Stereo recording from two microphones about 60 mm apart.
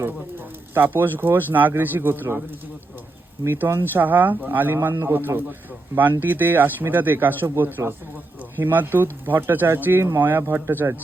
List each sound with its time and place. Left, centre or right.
0.0 s speech: right
3.4 s speech: right